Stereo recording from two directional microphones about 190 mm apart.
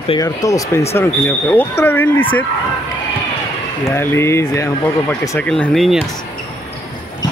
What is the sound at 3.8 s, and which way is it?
Speech, 15° left (ahead or behind).